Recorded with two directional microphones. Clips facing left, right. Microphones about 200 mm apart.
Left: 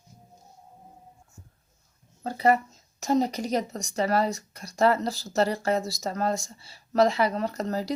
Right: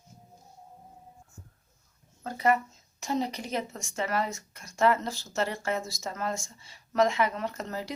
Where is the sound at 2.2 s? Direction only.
35° left (ahead or behind).